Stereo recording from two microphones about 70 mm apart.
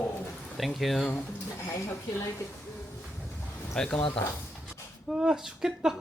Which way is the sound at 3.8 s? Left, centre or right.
Centre.